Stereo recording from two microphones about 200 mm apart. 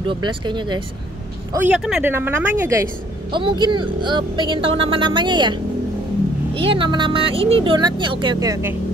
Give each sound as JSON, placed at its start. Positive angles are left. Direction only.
{"t": 0.0, "sound": "speech", "side_deg": -25}
{"t": 1.5, "sound": "speech", "side_deg": -10}